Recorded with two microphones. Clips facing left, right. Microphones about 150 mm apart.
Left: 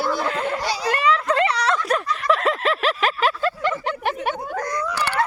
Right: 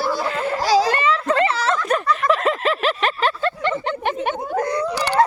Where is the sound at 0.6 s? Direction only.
90° right.